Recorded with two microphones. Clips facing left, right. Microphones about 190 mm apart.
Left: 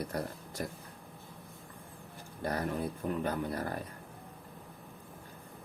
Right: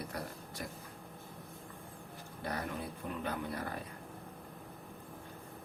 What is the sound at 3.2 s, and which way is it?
Speech, 45° left (ahead or behind).